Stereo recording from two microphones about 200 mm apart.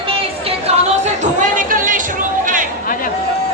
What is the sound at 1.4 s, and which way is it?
Chatter, 40° right (ahead or behind).